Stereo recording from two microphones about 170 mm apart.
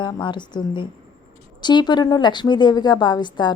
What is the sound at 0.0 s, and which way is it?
A woman's voice, 25° left (ahead or behind).